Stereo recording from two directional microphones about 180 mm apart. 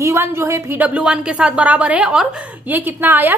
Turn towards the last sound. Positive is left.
turn(degrees=-10)  # may be behind; listen again after turning